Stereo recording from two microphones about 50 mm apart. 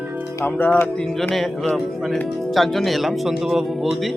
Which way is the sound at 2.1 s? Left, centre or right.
Centre.